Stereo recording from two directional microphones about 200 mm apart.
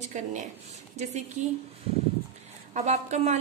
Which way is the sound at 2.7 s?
35° right (ahead or behind).